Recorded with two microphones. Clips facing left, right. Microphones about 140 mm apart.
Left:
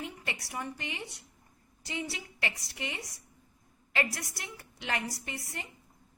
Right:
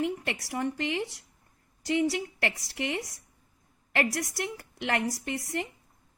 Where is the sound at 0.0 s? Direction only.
70° right (ahead or behind).